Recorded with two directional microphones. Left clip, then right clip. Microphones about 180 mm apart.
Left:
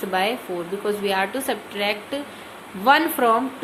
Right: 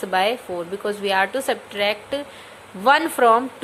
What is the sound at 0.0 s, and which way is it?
A woman's voice, 30° right (ahead or behind).